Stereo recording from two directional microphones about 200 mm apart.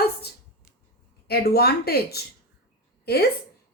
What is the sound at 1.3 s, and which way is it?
A woman's voice, 50° left (ahead or behind).